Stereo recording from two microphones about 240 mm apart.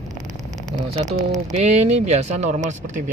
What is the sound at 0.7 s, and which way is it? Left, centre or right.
Speech, right.